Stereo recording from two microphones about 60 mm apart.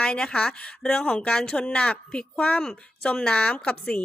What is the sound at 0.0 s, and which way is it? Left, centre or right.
A woman's voice, centre.